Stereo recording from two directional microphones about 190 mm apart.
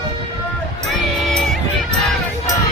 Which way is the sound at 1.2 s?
Centre (ahead or behind).